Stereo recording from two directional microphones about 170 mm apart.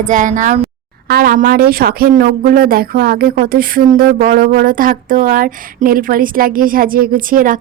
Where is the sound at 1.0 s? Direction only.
65° right (ahead or behind).